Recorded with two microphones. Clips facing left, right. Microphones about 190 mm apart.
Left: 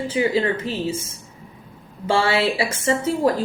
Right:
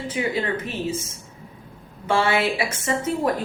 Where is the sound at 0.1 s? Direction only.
30° left (ahead or behind).